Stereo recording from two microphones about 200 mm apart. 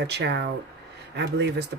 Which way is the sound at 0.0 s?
55° right (ahead or behind).